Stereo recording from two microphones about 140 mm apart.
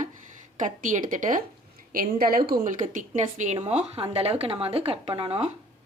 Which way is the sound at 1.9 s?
90° right.